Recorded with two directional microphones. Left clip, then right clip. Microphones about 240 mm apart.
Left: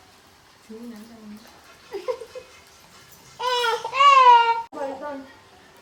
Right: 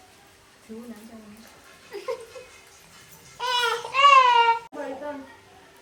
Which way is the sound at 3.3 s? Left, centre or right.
Left.